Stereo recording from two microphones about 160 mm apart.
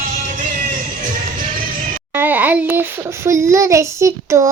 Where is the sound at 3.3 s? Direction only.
20° right (ahead or behind).